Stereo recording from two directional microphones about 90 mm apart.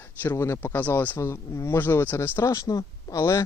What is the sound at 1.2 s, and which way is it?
Speech, 35° left (ahead or behind).